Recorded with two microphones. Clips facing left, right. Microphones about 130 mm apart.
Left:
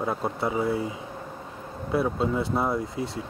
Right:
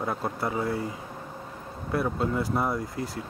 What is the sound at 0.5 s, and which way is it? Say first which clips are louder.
Speech: left 3 dB; 25° left (ahead or behind).